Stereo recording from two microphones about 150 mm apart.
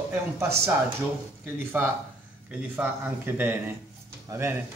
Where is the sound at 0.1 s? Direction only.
20° right (ahead or behind).